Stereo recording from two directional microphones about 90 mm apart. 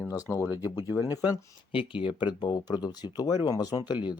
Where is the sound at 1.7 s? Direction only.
75° left (ahead or behind).